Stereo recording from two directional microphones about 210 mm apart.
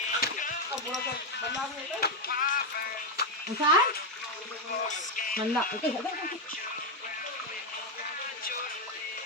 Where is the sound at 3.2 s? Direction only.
50° left (ahead or behind).